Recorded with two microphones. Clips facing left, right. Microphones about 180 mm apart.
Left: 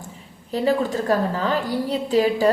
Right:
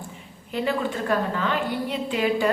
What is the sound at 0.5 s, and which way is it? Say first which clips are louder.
A woman's voice: left 5 dB; 40° left (ahead or behind).